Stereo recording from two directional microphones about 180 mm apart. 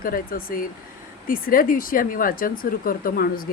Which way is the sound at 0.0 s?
55° left (ahead or behind).